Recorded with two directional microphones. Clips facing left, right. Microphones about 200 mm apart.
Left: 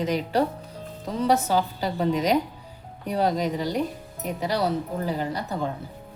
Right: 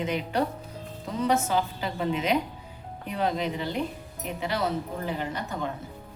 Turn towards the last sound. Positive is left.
turn(degrees=35)  # may be behind; listen again after turning